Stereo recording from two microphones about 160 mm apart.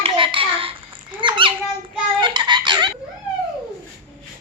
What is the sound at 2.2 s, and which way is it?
Baby laughter, 30° right (ahead or behind).